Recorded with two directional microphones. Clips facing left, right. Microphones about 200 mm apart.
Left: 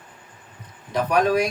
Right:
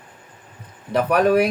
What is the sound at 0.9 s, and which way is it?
Speech, 60° right (ahead or behind).